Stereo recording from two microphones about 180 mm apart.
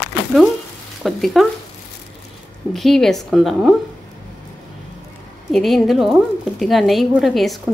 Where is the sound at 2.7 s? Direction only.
Centre (ahead or behind).